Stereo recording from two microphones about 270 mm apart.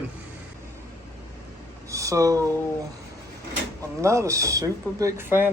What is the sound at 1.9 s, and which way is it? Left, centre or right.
Speech, centre.